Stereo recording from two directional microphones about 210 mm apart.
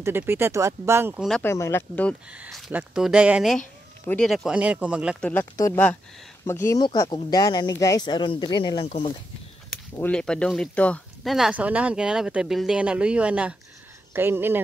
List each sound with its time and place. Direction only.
0.0 s speech: 10° right (ahead or behind)
1.4 s speech: 10° left (ahead or behind)
2.3 s speech: 5° right (ahead or behind)
5.2 s speech: 10° left (ahead or behind); by 9.1 s 25° left (ahead or behind)
9.9 s speech: 5° left (ahead or behind); by 14.6 s 10° right (ahead or behind)